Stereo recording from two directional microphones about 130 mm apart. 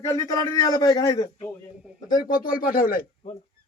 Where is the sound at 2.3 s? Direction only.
90° left.